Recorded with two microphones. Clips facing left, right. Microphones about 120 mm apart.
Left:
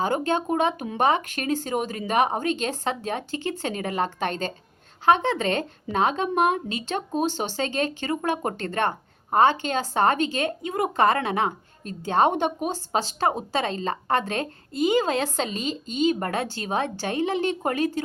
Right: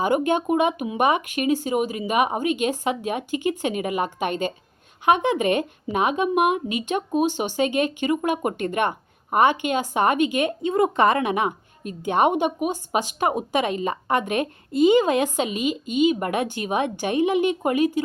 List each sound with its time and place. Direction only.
0.0 s speech: 15° right (ahead or behind)